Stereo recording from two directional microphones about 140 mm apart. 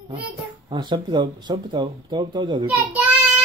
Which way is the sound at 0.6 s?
30° right (ahead or behind).